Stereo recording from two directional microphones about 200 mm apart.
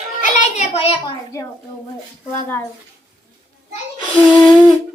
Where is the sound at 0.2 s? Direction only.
35° left (ahead or behind).